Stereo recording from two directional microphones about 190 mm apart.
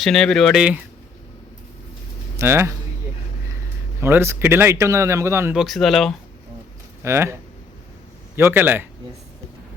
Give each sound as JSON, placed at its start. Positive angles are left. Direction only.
{"t": 0.0, "sound": "speech", "side_deg": 0}
{"t": 2.3, "sound": "speech", "side_deg": -15}
{"t": 4.0, "sound": "speech", "side_deg": -15}
{"t": 7.0, "sound": "speech", "side_deg": -15}
{"t": 8.4, "sound": "speech", "side_deg": -10}